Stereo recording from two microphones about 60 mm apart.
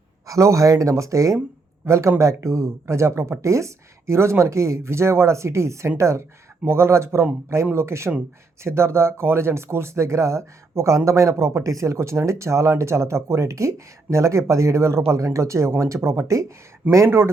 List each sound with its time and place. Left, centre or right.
0.3 s speech: right
17.1 s speech: right